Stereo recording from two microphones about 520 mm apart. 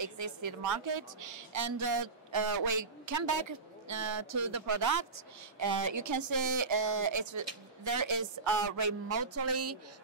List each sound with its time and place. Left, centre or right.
0.0 s speech: right